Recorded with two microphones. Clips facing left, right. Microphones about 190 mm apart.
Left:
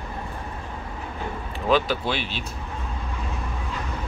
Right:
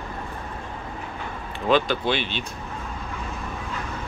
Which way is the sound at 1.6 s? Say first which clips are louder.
Right 1 dB; 5° left (ahead or behind).